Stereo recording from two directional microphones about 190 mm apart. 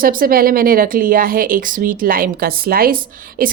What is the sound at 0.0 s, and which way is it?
A woman's voice, 50° right (ahead or behind).